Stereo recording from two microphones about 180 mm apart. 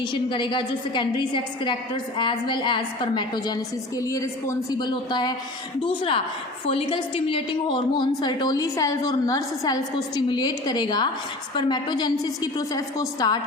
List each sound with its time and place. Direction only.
0.0 s a woman's voice: 25° left (ahead or behind)